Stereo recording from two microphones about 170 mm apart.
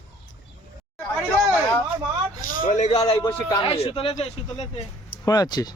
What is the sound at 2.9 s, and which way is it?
Speech, 25° left (ahead or behind).